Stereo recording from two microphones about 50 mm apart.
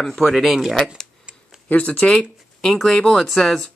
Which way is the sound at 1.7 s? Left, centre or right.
Left.